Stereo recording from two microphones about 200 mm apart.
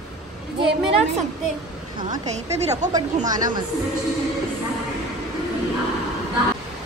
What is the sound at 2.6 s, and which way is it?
Speech, 35° right (ahead or behind).